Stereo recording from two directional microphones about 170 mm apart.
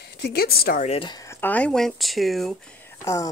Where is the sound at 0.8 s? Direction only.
30° left (ahead or behind); by 2.5 s centre (ahead or behind).